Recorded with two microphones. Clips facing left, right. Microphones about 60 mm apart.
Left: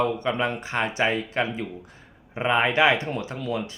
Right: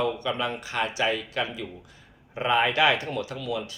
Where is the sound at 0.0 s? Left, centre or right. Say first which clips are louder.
Left 3 dB; left.